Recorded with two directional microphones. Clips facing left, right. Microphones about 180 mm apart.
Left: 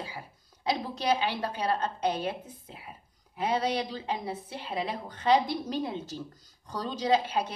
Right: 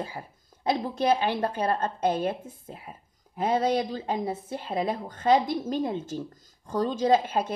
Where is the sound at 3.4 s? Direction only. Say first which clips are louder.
Right 4 dB; 50° right (ahead or behind).